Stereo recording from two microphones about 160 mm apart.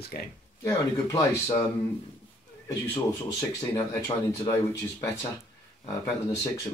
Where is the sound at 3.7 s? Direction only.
20° left (ahead or behind).